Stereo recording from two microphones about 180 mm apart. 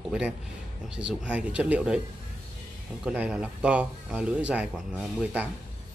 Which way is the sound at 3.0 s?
5° right (ahead or behind).